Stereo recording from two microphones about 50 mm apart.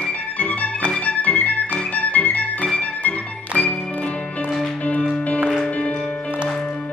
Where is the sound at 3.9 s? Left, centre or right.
Left.